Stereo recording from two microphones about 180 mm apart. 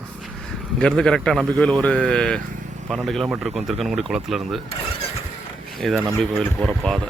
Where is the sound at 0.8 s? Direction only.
5° left (ahead or behind).